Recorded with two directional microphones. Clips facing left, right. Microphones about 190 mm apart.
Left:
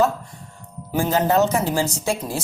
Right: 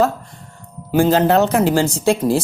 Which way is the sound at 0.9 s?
85° right.